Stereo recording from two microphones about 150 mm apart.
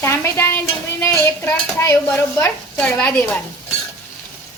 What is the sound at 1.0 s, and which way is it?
Speech, 20° left (ahead or behind).